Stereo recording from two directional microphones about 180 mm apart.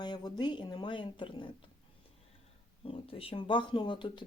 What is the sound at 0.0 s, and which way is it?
Speech, 25° left (ahead or behind).